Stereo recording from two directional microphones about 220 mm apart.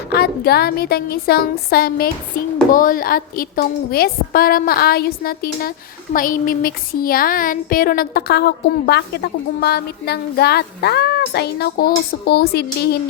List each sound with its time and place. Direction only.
0.1 s speech: 45° left (ahead or behind)